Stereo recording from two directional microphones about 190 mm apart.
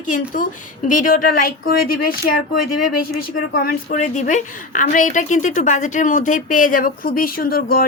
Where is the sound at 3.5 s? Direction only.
50° left (ahead or behind).